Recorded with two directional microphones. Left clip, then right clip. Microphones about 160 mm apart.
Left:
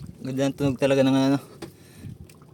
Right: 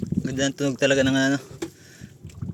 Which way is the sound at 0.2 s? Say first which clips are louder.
Even; 20° left (ahead or behind).